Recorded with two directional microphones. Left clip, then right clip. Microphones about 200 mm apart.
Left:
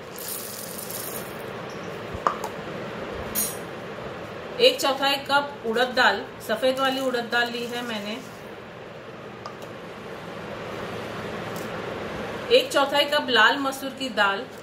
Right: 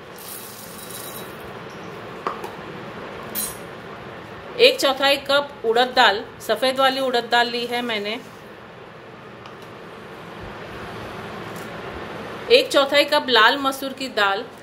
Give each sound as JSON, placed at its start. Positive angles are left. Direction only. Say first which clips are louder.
{"t": 4.6, "sound": "a woman's voice", "louder": "right 4 dB", "side_deg": -45}
{"t": 12.4, "sound": "a woman's voice", "louder": "right 4 dB", "side_deg": -45}